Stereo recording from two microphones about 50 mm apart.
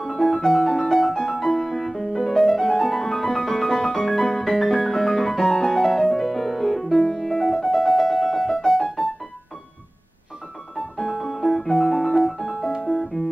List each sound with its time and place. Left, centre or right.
0.0 s music: centre
11.0 s piano: centre
12.8 s music: centre